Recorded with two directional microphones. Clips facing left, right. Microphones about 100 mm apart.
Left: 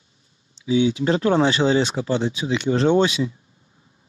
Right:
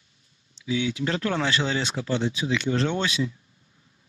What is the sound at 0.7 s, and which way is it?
Speech, 25° left (ahead or behind).